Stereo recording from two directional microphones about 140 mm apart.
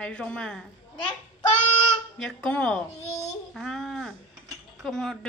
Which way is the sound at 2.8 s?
50° left (ahead or behind).